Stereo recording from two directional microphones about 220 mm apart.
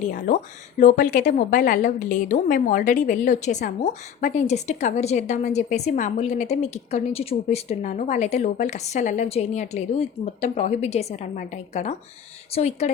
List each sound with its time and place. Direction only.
0.1 s a woman's voice: 35° left (ahead or behind)